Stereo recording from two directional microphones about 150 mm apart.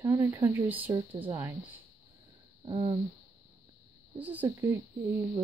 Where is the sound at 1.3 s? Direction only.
15° right (ahead or behind).